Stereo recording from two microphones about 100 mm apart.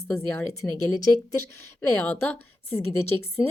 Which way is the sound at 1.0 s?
40° left (ahead or behind).